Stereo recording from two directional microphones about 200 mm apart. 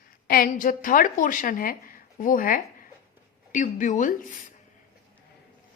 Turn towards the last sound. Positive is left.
turn(degrees=40)  # may be behind; listen again after turning